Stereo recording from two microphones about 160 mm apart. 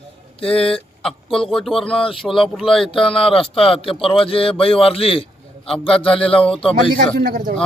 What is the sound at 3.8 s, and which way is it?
A man's voice, 35° left (ahead or behind).